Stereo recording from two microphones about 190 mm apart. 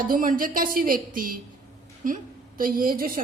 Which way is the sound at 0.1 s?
45° right (ahead or behind).